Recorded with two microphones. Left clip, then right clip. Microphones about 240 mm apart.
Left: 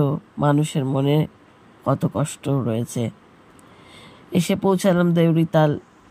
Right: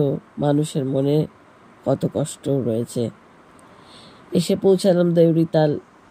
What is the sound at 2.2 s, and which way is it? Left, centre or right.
Speech, centre.